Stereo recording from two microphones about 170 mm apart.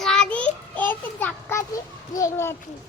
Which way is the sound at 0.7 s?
10° left (ahead or behind).